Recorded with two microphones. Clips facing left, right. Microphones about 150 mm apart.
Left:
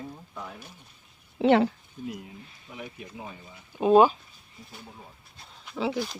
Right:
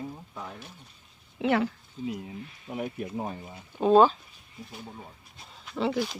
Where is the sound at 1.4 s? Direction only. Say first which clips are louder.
Left 5 dB; 30° left (ahead or behind).